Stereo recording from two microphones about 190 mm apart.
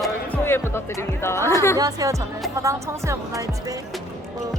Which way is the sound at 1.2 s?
15° left (ahead or behind).